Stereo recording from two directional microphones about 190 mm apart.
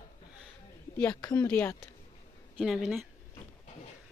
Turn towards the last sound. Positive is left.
turn(degrees=0)  # may be behind; listen again after turning